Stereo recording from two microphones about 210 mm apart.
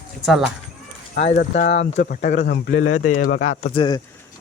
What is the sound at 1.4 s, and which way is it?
Speech, 35° left (ahead or behind).